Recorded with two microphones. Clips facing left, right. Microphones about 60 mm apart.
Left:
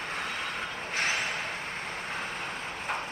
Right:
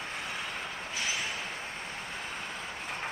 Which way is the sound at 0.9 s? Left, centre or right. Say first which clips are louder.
Left 6 dB; left.